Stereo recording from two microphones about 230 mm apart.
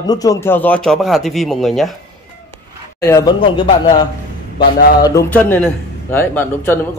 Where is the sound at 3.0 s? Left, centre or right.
Centre.